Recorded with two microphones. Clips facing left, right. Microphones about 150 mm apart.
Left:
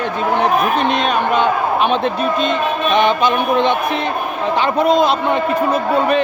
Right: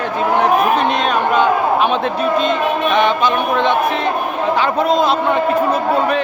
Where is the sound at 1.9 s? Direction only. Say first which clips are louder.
Even; 10° right (ahead or behind).